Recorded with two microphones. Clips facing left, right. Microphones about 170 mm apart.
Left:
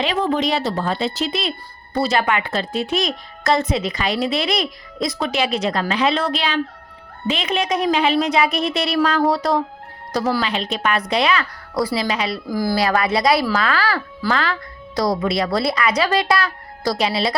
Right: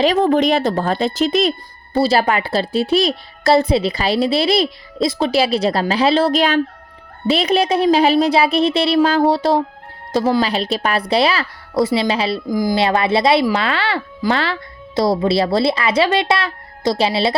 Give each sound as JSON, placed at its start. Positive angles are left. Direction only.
{"t": 0.0, "sound": "a woman's voice", "side_deg": -45}
{"t": 1.9, "sound": "speech", "side_deg": -30}
{"t": 12.5, "sound": "speech", "side_deg": -15}